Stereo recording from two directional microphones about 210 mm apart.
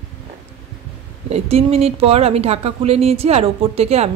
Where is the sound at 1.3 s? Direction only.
30° right (ahead or behind).